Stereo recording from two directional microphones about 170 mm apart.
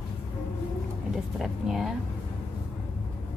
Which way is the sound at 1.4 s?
Centre (ahead or behind).